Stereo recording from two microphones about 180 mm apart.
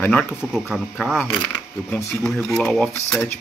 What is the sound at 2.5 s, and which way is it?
Speech, 5° left (ahead or behind).